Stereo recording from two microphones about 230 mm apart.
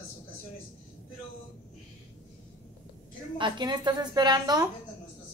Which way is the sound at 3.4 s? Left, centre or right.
Centre.